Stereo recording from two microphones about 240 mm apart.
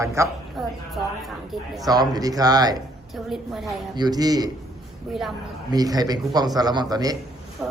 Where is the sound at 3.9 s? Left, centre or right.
Centre.